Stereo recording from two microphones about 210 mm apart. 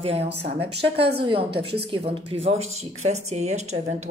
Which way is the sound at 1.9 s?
25° right (ahead or behind).